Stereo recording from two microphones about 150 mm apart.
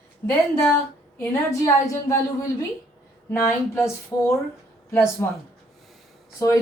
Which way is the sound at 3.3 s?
15° left (ahead or behind).